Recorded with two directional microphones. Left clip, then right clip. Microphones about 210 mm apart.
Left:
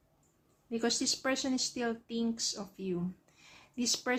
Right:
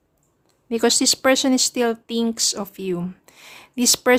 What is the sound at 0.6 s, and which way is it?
Speech, 50° right (ahead or behind).